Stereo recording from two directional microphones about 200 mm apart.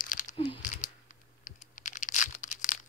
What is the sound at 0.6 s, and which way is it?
Tearing, 40° left (ahead or behind).